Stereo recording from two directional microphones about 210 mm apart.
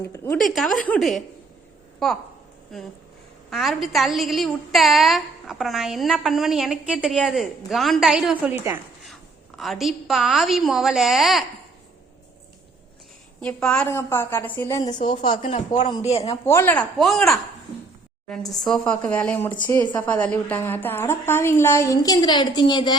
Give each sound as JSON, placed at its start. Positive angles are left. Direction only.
{"t": 0.0, "sound": "a woman's voice", "side_deg": 15}
{"t": 0.5, "sound": "a woman's voice", "side_deg": 0}
{"t": 9.6, "sound": "a woman's voice", "side_deg": 0}
{"t": 13.4, "sound": "a woman's voice", "side_deg": 5}
{"t": 14.9, "sound": "speech", "side_deg": 25}
{"t": 16.5, "sound": "a woman's voice", "side_deg": 10}